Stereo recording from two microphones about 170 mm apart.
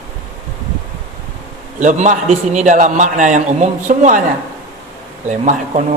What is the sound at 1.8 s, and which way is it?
A man's voice, 45° right (ahead or behind).